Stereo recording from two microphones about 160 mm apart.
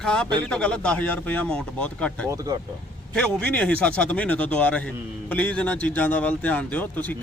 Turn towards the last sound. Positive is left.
turn(degrees=10)  # may be behind; listen again after turning